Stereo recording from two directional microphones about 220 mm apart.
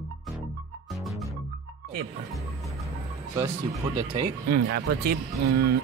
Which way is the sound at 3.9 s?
20° right (ahead or behind).